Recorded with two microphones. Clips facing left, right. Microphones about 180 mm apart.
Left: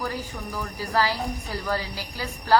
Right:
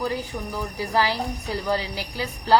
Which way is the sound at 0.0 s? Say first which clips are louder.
Right 4 dB; 20° right (ahead or behind).